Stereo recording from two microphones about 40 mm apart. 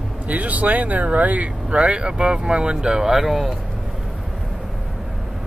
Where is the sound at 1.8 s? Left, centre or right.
Right.